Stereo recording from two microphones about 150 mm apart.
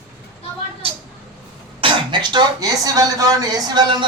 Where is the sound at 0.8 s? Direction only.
40° right (ahead or behind).